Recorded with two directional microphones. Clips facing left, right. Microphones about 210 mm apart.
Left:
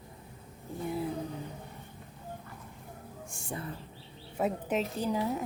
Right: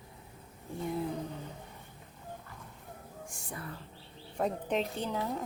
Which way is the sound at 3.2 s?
25° left (ahead or behind).